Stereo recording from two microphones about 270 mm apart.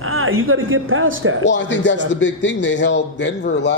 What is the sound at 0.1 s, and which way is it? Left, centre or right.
Speech, right.